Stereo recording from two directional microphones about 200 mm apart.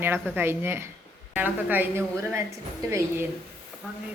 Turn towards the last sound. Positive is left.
turn(degrees=-15)  # may be behind; listen again after turning